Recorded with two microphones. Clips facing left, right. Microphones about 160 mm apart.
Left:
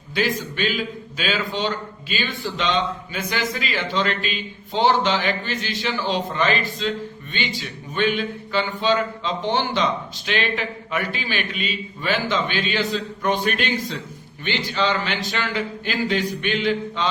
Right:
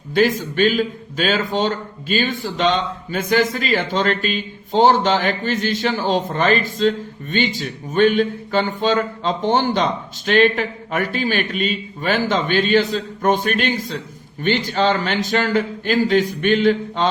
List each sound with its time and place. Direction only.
0.1 s speech: 50° right (ahead or behind)